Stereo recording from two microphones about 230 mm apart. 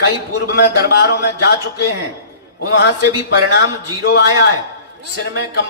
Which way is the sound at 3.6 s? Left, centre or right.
Left.